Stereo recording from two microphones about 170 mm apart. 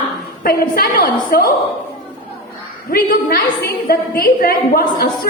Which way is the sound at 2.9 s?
60° left (ahead or behind).